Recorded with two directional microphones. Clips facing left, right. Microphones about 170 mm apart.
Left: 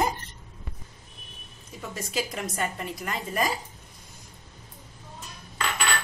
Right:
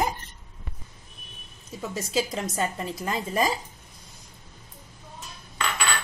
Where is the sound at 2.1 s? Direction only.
25° right (ahead or behind).